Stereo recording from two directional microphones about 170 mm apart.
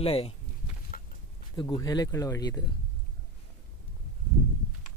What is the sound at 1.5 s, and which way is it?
Speech, 25° left (ahead or behind).